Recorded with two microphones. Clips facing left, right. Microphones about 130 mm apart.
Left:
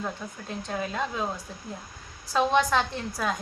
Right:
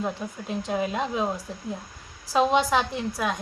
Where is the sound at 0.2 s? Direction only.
15° right (ahead or behind).